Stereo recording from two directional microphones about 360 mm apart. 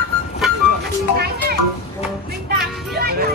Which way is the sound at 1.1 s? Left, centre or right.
Right.